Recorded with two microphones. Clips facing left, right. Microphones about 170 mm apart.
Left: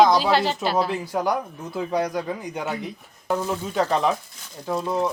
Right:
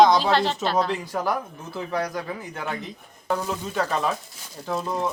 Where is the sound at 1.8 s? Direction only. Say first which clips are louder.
Left 3 dB; 15° left (ahead or behind).